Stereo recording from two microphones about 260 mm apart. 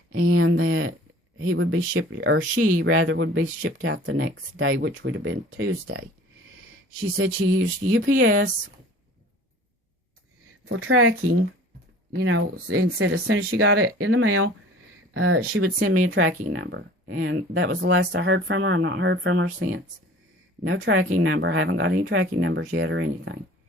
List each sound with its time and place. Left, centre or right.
0.1 s speech: right
7.5 s speech: right
10.7 s speech: right
12.2 s speech: right
20.7 s speech: right